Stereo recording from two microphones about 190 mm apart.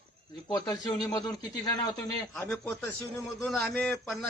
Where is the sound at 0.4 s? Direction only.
25° left (ahead or behind).